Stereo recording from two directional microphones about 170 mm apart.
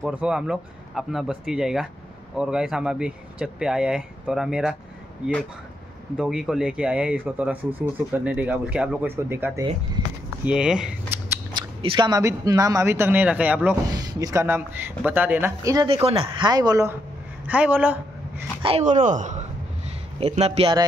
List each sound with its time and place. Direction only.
0.0 s speech: 5° right (ahead or behind)
6.1 s speech: 5° right (ahead or behind)
11.8 s speech: 30° right (ahead or behind); by 13.6 s 10° right (ahead or behind)
13.9 s speech: 20° right (ahead or behind)
17.5 s speech: 10° right (ahead or behind)
18.6 s speech: 35° right (ahead or behind)
19.0 s a man's voice: 45° right (ahead or behind)